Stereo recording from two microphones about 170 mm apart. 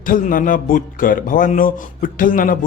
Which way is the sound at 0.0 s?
55° left (ahead or behind).